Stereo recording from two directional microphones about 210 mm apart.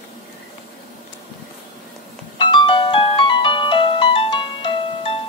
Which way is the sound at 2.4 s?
25° left (ahead or behind).